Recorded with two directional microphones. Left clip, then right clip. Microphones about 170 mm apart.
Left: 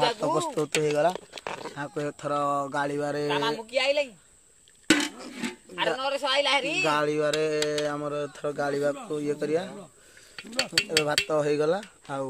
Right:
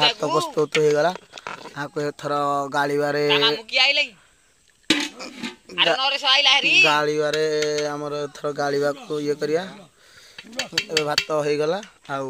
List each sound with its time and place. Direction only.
0.2 s speech: 35° right (ahead or behind)
1.3 s a sound: 40° left (ahead or behind)
1.8 s speech: 35° right (ahead or behind)
3.3 s speech: 55° left (ahead or behind)
4.8 s a sound: 15° right (ahead or behind)
5.9 s speech: 60° left (ahead or behind)
6.9 s speech: 25° right (ahead or behind)
10.9 s cutlery: 20° right (ahead or behind)